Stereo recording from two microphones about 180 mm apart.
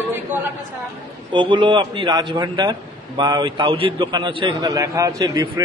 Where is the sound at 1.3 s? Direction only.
25° right (ahead or behind).